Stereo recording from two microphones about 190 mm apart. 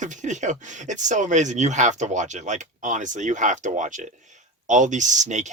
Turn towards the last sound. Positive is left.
turn(degrees=-40)  # may be behind; listen again after turning